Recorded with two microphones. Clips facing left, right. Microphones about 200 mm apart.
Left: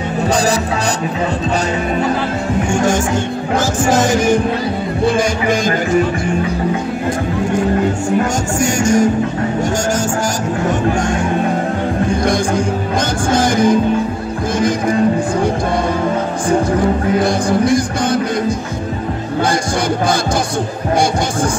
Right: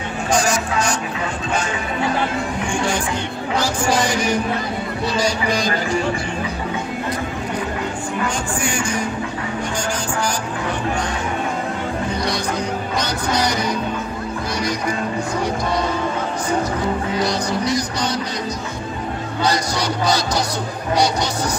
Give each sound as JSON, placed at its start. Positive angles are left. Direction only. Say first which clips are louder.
{"t": 2.7, "sound": "speech", "louder": "left 7 dB", "side_deg": 45}
{"t": 8.2, "sound": "speech", "louder": "left 7 dB", "side_deg": 45}
{"t": 12.2, "sound": "speech", "louder": "left 7 dB", "side_deg": 50}
{"t": 17.2, "sound": "speech", "louder": "left 6 dB", "side_deg": 50}